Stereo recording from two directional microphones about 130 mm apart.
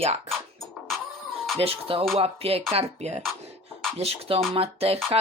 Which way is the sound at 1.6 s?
45° right (ahead or behind).